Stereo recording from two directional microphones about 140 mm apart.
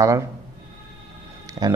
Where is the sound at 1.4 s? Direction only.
30° right (ahead or behind).